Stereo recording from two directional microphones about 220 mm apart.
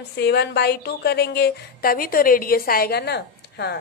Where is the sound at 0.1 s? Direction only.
50° left (ahead or behind).